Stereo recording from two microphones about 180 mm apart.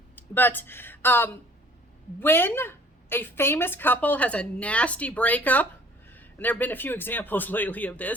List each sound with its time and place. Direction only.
0.2 s a woman's voice: 10° left (ahead or behind)